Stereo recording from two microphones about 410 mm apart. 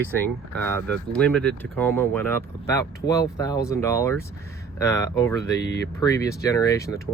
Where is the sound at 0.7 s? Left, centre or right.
Centre.